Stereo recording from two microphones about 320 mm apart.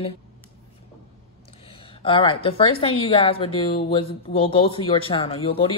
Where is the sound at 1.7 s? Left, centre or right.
Centre.